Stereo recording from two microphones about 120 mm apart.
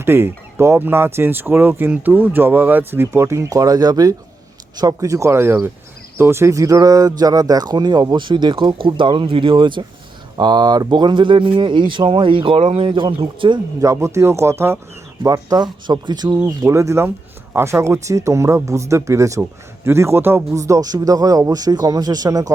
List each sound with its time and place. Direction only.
0.0 s speech: 20° right (ahead or behind); by 13.6 s 45° right (ahead or behind)
13.7 s speech: 25° right (ahead or behind)
16.6 s speech: 25° right (ahead or behind)